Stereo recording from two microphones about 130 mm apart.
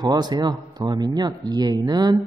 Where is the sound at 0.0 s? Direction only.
30° right (ahead or behind).